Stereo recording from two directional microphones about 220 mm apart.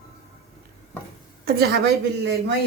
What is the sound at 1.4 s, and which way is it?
Speech, 45° right (ahead or behind).